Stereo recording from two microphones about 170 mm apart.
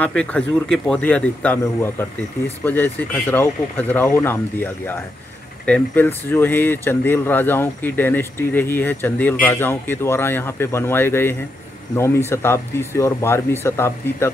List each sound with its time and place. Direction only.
0.0 s speech: 5° left (ahead or behind)